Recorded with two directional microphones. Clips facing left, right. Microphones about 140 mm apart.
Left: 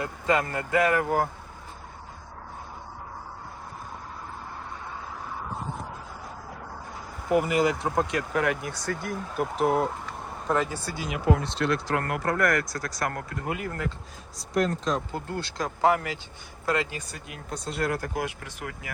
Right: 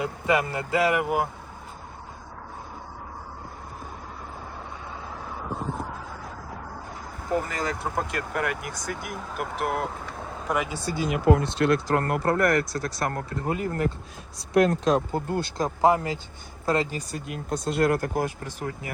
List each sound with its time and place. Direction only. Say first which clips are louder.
0.0 s speech: right 1 dB; 15° right (ahead or behind)
7.3 s speech: left 5 dB; 10° left (ahead or behind)
7.8 s speech: left 3 dB; 5° right (ahead or behind)
10.5 s speech: left 1 dB; 15° right (ahead or behind)
11.1 s speech: right 4 dB; 50° right (ahead or behind); by 13.9 s 35° right (ahead or behind)
14.3 s speech: right 5 dB; 60° right (ahead or behind)
15.1 s speech: right 5 dB; 45° right (ahead or behind)
15.6 s speech: right 2 dB; 25° right (ahead or behind)